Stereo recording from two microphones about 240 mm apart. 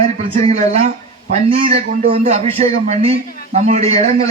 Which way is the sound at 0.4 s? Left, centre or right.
Right.